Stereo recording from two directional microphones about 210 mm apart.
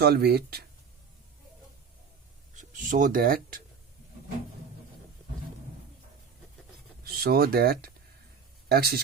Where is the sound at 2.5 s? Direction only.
35° right (ahead or behind).